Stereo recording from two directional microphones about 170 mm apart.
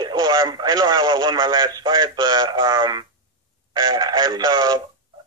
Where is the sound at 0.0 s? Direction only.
25° right (ahead or behind).